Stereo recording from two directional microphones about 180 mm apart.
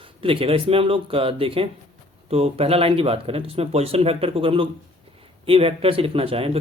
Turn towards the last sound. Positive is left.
turn(degrees=-30)  # may be behind; listen again after turning